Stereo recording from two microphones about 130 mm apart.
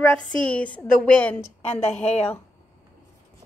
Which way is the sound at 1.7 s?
55° left (ahead or behind).